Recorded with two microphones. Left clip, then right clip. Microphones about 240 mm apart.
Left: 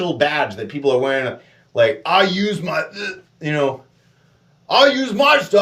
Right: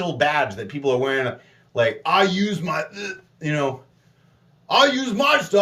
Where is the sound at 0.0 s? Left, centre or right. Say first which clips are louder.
Left 2 dB; centre.